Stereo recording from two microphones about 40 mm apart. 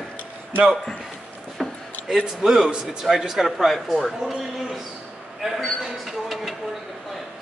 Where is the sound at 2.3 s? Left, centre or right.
Centre.